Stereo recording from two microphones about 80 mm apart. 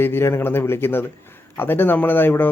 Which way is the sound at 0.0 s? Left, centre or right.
Left.